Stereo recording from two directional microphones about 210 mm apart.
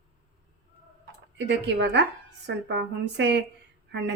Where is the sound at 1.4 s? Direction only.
55° right (ahead or behind).